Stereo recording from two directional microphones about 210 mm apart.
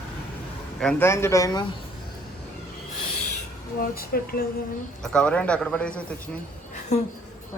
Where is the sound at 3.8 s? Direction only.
45° left (ahead or behind).